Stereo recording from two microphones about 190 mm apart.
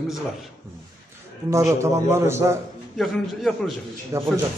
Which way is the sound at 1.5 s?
15° right (ahead or behind).